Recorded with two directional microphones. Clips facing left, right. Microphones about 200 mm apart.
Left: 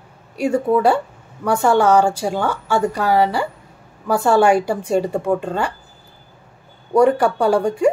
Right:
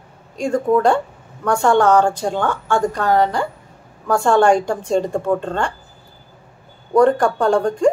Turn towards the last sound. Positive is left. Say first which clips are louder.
# even
turn(degrees=10)  # may be behind; listen again after turning